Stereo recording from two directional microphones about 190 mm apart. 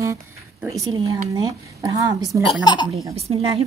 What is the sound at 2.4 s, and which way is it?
Speech, 25° left (ahead or behind).